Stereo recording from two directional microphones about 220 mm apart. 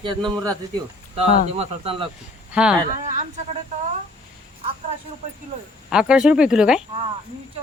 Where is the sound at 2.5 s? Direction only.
5° right (ahead or behind).